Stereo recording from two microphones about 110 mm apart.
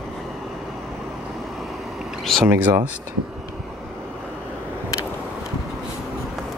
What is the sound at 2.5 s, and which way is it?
Speech, 15° right (ahead or behind).